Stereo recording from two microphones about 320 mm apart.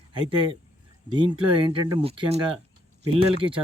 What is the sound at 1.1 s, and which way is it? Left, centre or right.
Speech, centre.